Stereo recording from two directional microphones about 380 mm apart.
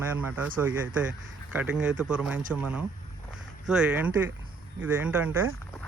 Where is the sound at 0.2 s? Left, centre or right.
Centre.